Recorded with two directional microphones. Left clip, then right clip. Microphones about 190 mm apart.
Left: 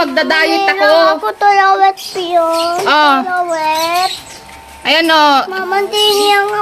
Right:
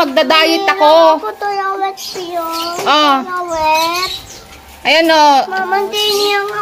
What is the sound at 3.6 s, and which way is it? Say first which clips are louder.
Speech: right 5 dB; 30° left (ahead or behind).